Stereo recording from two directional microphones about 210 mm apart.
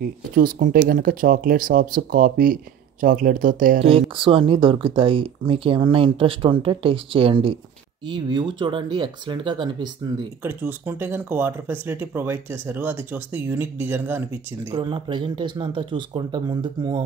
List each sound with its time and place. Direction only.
0.4 s speech: 40° right (ahead or behind)
3.8 s speech: 25° right (ahead or behind)
10.4 s speech: 10° right (ahead or behind)
14.7 s speech: 20° right (ahead or behind)